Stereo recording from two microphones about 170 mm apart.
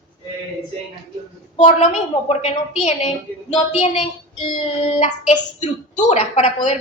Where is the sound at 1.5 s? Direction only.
40° left (ahead or behind).